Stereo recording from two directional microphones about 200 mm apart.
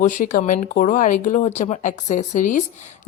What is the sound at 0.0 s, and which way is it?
Speech, 40° left (ahead or behind).